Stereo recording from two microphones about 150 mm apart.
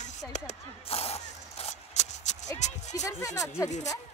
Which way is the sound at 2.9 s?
20° left (ahead or behind).